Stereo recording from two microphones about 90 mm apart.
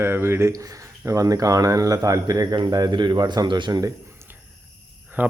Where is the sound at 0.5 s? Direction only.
40° right (ahead or behind).